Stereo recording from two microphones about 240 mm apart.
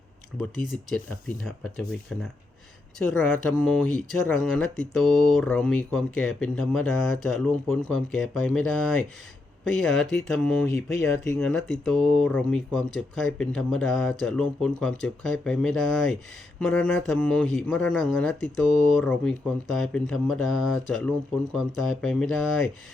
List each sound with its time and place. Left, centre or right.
0.7 s a man's voice: centre
2.1 s a man's voice: centre